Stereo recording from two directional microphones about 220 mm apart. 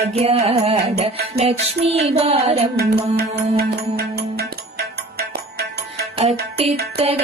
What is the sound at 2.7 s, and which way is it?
Music, 45° right (ahead or behind).